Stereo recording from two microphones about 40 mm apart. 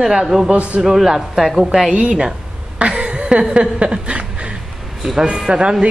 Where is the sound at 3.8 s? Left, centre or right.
Right.